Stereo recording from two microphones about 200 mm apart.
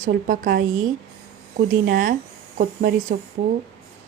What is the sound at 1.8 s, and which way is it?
Speech, 50° right (ahead or behind).